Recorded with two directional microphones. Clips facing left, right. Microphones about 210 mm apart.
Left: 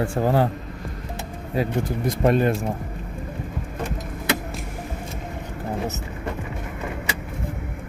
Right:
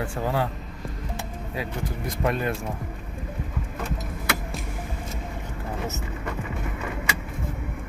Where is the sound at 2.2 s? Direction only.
30° left (ahead or behind).